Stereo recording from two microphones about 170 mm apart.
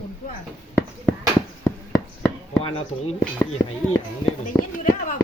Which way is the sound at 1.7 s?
15° left (ahead or behind).